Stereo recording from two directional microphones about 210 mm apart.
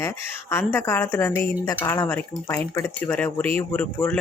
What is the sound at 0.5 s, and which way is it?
Speech, 10° left (ahead or behind).